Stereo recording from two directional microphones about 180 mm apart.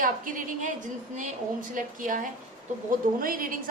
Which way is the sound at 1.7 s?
50° right (ahead or behind).